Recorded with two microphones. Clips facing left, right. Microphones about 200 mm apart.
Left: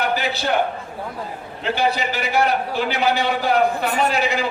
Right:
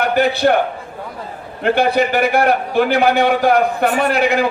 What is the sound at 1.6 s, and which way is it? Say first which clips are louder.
A man's voice: right 7 dB; 55° right (ahead or behind).